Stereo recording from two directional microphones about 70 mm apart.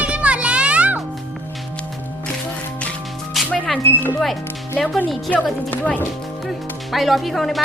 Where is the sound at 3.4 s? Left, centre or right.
Centre.